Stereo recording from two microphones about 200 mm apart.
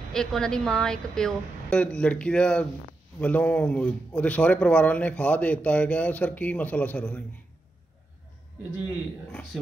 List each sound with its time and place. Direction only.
0.1 s a woman's voice: 5° left (ahead or behind)
9.3 s a man's voice: 5° left (ahead or behind)